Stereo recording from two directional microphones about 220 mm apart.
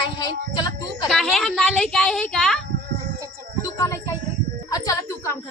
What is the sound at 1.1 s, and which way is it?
A woman's voice, centre (ahead or behind).